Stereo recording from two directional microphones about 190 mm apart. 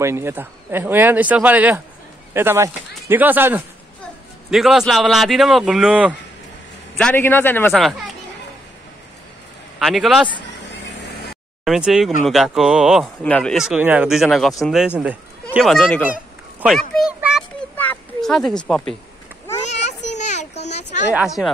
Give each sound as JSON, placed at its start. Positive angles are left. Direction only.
{"t": 0.0, "sound": "a man's voice", "side_deg": -15}
{"t": 7.0, "sound": "a man's voice", "side_deg": 10}
{"t": 9.8, "sound": "a man's voice", "side_deg": 0}
{"t": 11.6, "sound": "a man's voice", "side_deg": 0}
{"t": 16.1, "sound": "a sound", "side_deg": -5}
{"t": 19.7, "sound": "a sound", "side_deg": 35}
{"t": 21.1, "sound": "a man's voice", "side_deg": -5}